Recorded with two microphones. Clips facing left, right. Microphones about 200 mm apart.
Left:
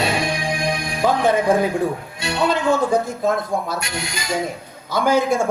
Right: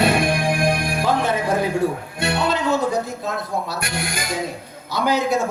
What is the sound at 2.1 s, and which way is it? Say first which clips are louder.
Music: right 3 dB; 55° right (ahead or behind).